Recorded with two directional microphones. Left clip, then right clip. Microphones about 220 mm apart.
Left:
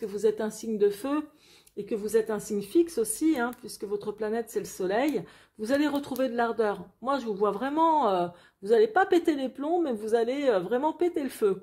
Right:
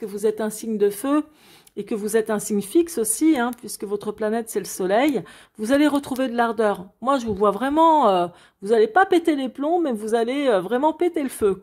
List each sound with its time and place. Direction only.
0.0 s a woman's voice: 25° right (ahead or behind)